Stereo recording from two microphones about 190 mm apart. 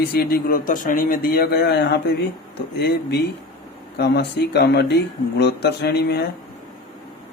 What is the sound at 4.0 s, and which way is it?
Speech, 60° left (ahead or behind).